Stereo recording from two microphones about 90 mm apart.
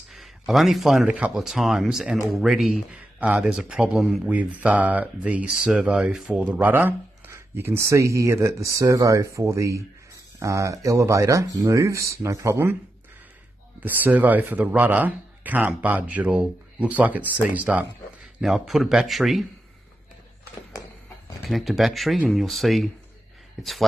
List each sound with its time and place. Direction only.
0.1 s a sound: centre (ahead or behind)
1.0 s speech: 15° right (ahead or behind); by 12.7 s 30° right (ahead or behind)
13.7 s speech: 20° right (ahead or behind)
18.4 s speech: 5° right (ahead or behind)
21.5 s speech: centre (ahead or behind)